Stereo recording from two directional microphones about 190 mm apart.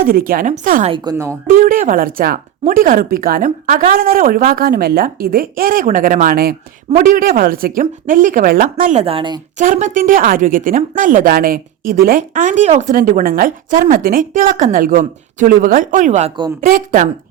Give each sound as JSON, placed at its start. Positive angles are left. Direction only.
{"t": 0.0, "sound": "speech", "side_deg": -50}
{"t": 0.9, "sound": "speech", "side_deg": -25}
{"t": 1.6, "sound": "speech", "side_deg": -45}
{"t": 8.8, "sound": "speech", "side_deg": -40}
{"t": 9.6, "sound": "speech", "side_deg": -40}